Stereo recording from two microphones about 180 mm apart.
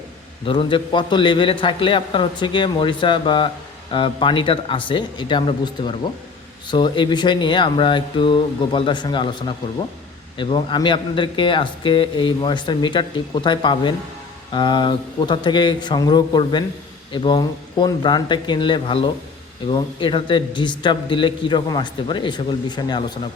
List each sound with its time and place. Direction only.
0.4 s a man's voice: 25° left (ahead or behind)